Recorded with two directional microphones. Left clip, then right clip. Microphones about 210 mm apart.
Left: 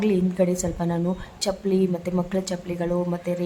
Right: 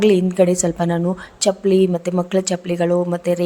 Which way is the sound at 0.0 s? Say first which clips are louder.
Right 8 dB; 30° right (ahead or behind).